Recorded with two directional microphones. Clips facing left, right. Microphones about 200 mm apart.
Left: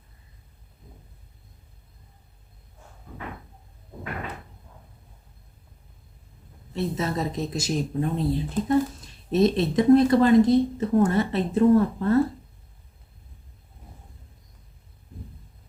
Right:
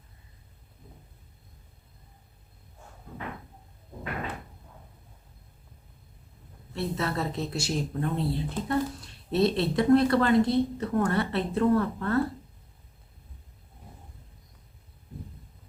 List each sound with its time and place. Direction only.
6.7 s speech: 20° left (ahead or behind)